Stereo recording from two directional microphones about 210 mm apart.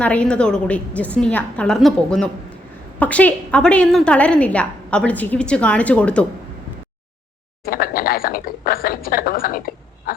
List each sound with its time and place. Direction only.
0.0 s a woman's voice: 5° left (ahead or behind)
7.6 s speech: 45° left (ahead or behind)